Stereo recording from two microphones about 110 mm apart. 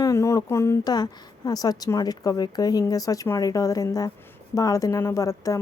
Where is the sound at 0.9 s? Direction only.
40° left (ahead or behind).